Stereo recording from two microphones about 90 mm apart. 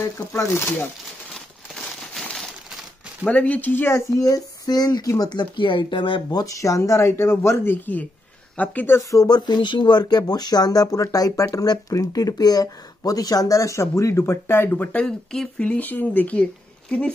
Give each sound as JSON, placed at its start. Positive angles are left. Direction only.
{"t": 0.3, "sound": "speech", "side_deg": 30}
{"t": 1.3, "sound": "crumpling", "side_deg": 5}
{"t": 3.3, "sound": "speech", "side_deg": 15}
{"t": 3.9, "sound": "speech", "side_deg": 40}
{"t": 6.3, "sound": "speech", "side_deg": 40}
{"t": 9.1, "sound": "speech", "side_deg": 45}